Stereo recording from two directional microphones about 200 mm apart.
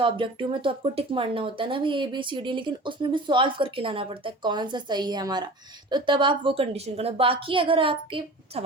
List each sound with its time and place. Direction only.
0.0 s speech: 25° right (ahead or behind)